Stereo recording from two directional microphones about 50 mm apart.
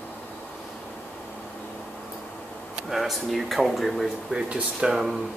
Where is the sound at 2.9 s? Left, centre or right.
Centre.